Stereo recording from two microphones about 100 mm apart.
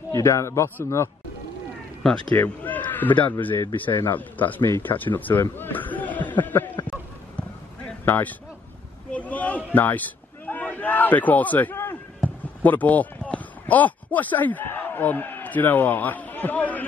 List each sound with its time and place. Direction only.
0.1 s a man's voice: 30° left (ahead or behind)
2.3 s speech: 15° left (ahead or behind)
6.9 s basketball bounce: 15° left (ahead or behind)
9.1 s a sound: 15° left (ahead or behind)
12.6 s speech: 15° left (ahead or behind)